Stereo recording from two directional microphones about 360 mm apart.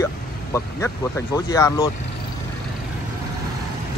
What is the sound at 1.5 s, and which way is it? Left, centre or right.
Speech, centre.